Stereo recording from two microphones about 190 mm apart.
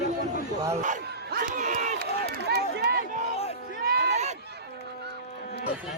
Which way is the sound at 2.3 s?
55° right (ahead or behind).